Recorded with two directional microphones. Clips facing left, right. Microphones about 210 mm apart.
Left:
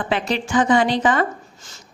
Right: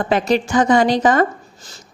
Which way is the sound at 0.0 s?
40° right (ahead or behind).